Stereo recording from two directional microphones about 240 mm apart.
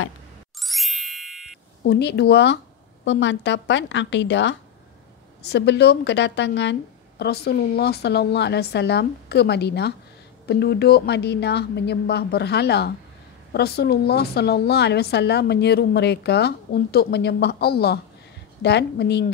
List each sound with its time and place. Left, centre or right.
0.6 s ding: centre
1.8 s speech: left